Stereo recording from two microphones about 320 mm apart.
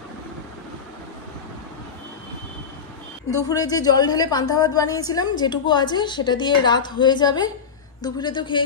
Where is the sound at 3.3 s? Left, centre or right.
Centre.